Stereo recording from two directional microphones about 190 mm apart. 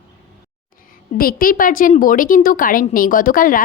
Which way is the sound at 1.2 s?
50° left (ahead or behind).